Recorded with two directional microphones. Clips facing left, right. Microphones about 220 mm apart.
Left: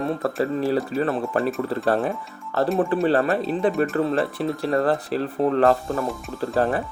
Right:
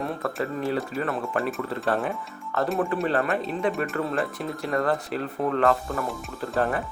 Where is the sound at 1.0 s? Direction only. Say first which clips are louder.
Left 4 dB; 35° left (ahead or behind).